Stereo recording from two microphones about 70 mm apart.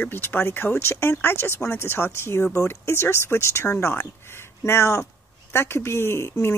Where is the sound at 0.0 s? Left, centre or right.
Left.